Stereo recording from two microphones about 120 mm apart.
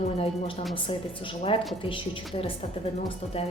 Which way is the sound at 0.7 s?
45° left (ahead or behind).